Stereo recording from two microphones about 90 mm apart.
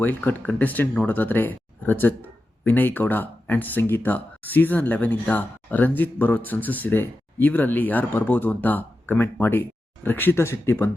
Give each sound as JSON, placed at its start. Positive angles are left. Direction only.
{"t": 0.0, "sound": "speech", "side_deg": 20}